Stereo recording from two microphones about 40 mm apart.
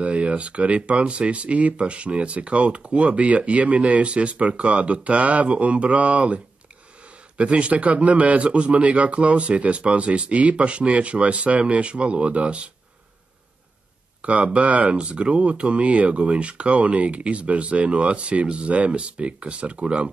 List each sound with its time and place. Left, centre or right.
0.0 s speech: right
14.2 s speech: right